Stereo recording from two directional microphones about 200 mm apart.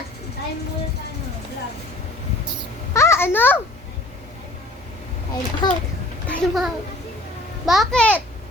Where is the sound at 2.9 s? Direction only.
15° left (ahead or behind).